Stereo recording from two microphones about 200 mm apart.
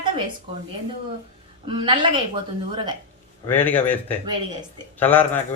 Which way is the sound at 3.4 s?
10° left (ahead or behind).